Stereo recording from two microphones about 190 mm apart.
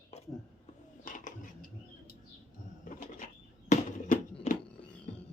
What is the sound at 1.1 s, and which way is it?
Dishes, 45° left (ahead or behind).